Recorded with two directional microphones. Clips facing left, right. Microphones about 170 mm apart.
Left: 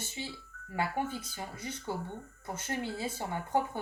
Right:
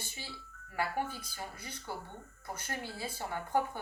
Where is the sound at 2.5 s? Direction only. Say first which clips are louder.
Left 5 dB; 25° left (ahead or behind).